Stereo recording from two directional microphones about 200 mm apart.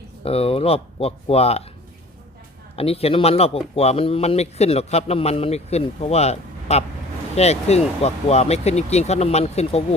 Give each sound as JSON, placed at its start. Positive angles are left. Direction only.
{"t": 0.2, "sound": "speech", "side_deg": 30}
{"t": 2.7, "sound": "speech", "side_deg": 30}